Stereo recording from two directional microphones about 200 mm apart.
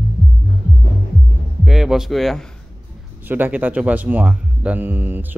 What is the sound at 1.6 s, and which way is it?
Speech, centre (ahead or behind).